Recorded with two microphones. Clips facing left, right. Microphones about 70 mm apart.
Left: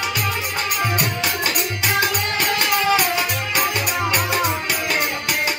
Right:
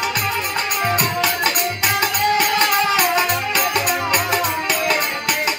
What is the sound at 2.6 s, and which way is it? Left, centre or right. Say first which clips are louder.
Music: right 2 dB; right.